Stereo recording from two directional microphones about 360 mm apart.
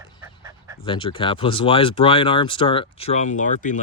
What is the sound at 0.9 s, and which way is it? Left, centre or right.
Speech, centre.